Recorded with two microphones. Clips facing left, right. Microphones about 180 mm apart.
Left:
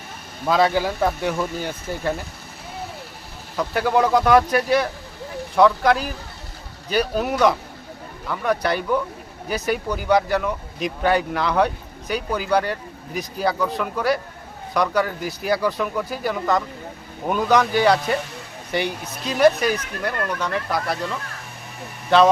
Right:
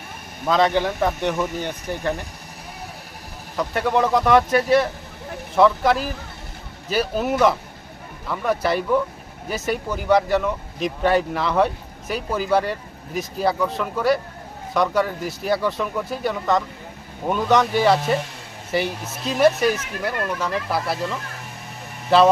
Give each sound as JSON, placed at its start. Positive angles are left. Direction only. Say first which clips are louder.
{"t": 0.4, "sound": "speech", "louder": "even", "side_deg": 5}
{"t": 1.9, "sound": "speech", "louder": "even", "side_deg": -15}
{"t": 3.6, "sound": "speech", "louder": "left 1 dB", "side_deg": 0}
{"t": 22.1, "sound": "speech", "louder": "even", "side_deg": -5}